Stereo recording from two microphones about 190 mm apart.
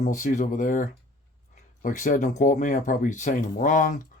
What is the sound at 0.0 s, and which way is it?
Speech, 40° left (ahead or behind).